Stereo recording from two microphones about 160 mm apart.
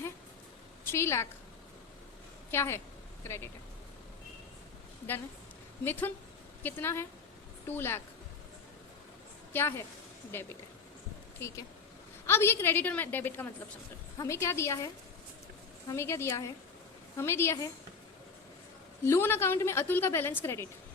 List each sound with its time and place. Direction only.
0.9 s a woman's voice: 15° left (ahead or behind)
2.5 s a woman's voice: 15° left (ahead or behind)
5.8 s a woman's voice: 10° left (ahead or behind)
9.5 s a woman's voice: 15° left (ahead or behind)
15.9 s a woman's voice: 15° left (ahead or behind)
19.0 s a woman's voice: 15° left (ahead or behind)